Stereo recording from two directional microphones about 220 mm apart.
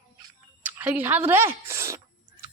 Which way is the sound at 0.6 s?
10° right (ahead or behind).